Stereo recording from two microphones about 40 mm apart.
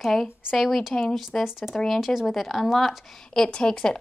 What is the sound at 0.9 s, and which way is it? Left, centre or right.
Speech, left.